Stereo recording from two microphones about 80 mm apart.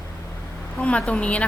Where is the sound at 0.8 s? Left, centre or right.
Centre.